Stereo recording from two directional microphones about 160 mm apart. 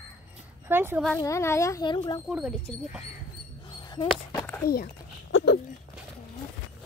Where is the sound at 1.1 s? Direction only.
20° left (ahead or behind).